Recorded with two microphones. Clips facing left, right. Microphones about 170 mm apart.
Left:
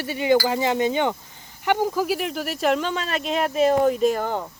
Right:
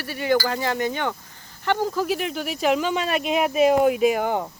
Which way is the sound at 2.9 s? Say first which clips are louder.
Right 3 dB; 15° right (ahead or behind).